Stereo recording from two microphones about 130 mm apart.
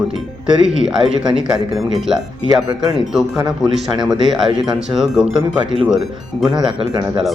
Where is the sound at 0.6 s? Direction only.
5° right (ahead or behind).